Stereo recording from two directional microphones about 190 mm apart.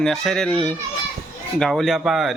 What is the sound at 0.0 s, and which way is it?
Speech, 5° left (ahead or behind).